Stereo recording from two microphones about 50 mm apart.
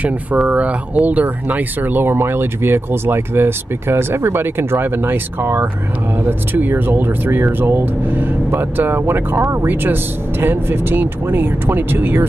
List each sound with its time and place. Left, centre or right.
0.0 s speech: right
10.4 s speech: right